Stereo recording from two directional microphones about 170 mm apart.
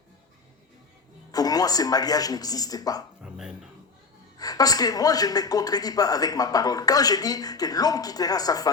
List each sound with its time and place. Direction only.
1.3 s a man's voice: 20° left (ahead or behind)
3.2 s music: 5° right (ahead or behind)
4.4 s a man's voice: 20° left (ahead or behind)